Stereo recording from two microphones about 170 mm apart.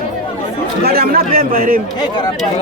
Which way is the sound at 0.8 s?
60° right (ahead or behind).